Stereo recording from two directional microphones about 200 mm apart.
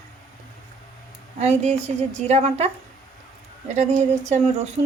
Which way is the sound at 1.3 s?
35° right (ahead or behind).